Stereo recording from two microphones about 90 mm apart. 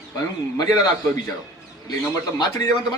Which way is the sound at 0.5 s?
45° left (ahead or behind).